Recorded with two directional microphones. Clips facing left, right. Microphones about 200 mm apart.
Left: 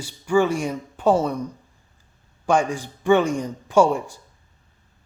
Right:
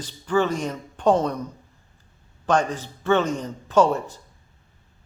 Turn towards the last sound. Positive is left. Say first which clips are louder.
# left 1 dB
turn(degrees=10)  # may be behind; listen again after turning